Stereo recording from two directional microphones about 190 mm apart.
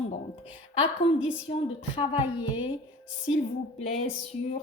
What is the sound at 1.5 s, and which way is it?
A woman's voice, 30° left (ahead or behind).